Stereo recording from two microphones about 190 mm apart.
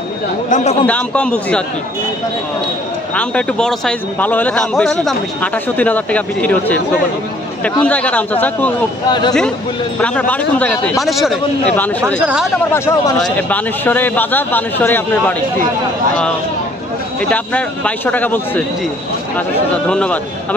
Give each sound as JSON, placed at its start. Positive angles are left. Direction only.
{"t": 0.5, "sound": "speech", "side_deg": 40}
{"t": 0.8, "sound": "a man's voice", "side_deg": 5}
{"t": 3.2, "sound": "a man's voice", "side_deg": 5}
{"t": 7.8, "sound": "a man's voice", "side_deg": 10}
{"t": 9.9, "sound": "a man's voice", "side_deg": 5}
{"t": 12.7, "sound": "a man's voice", "side_deg": 15}
{"t": 17.2, "sound": "a man's voice", "side_deg": 10}
{"t": 19.9, "sound": "speech", "side_deg": 5}